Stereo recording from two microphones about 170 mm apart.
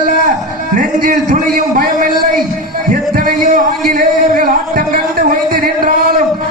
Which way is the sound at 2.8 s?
55° right (ahead or behind).